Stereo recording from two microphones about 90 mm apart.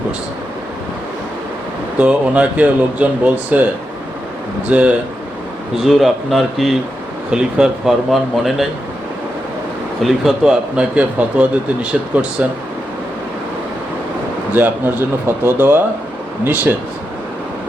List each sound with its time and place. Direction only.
2.0 s speech: 15° right (ahead or behind)
4.7 s speech: 15° right (ahead or behind)
5.8 s speech: centre (ahead or behind)
10.0 s speech: 5° right (ahead or behind)
14.5 s speech: 25° right (ahead or behind)